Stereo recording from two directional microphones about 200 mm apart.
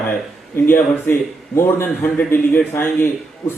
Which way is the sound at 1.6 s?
10° left (ahead or behind).